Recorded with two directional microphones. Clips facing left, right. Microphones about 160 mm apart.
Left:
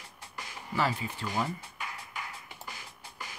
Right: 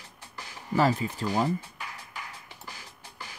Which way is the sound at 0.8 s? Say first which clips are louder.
Right 6 dB; 40° right (ahead or behind).